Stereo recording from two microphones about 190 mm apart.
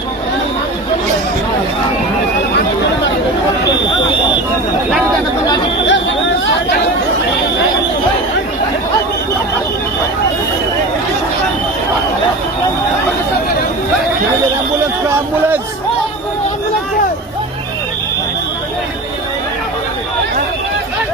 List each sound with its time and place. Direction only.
5.8 s chatter: 75° left (ahead or behind)